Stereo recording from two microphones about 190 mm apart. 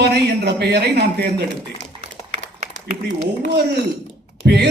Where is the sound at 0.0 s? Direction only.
60° right (ahead or behind).